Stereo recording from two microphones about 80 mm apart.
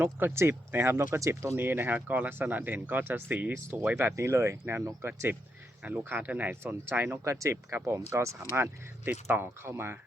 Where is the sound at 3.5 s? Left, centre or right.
Right.